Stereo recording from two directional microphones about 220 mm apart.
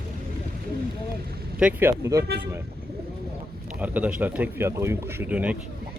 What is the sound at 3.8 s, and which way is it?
Speech, 5° right (ahead or behind).